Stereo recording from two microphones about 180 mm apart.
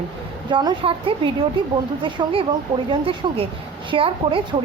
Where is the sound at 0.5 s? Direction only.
25° right (ahead or behind).